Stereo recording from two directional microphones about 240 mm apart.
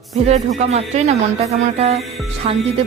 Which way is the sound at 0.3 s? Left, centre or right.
Right.